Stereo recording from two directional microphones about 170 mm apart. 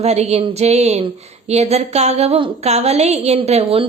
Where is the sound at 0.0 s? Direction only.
40° right (ahead or behind).